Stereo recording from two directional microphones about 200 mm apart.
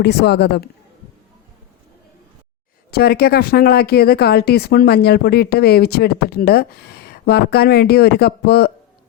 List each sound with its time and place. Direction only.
0.0 s a man's voice: 55° left (ahead or behind)
2.9 s speech: 50° left (ahead or behind)